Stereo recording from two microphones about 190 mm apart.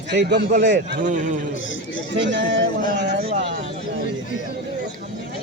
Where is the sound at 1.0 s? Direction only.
40° right (ahead or behind).